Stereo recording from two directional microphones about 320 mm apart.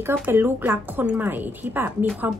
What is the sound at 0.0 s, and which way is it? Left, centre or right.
Speech, centre.